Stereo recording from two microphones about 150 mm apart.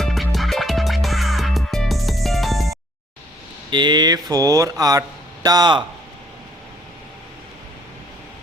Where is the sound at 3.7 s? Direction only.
30° right (ahead or behind).